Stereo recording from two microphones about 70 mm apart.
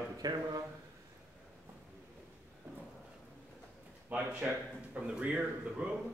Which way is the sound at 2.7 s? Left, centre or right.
Right.